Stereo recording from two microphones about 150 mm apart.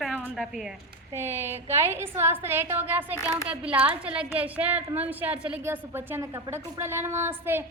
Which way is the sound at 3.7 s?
40° right (ahead or behind).